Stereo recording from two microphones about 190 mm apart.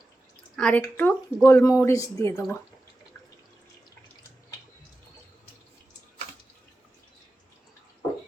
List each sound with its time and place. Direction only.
0.5 s a woman's voice: 5° left (ahead or behind)